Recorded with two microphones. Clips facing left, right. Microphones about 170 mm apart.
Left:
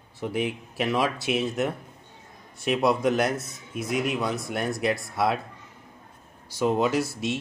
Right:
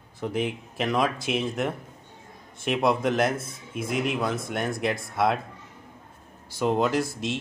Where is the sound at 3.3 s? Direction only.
25° right (ahead or behind).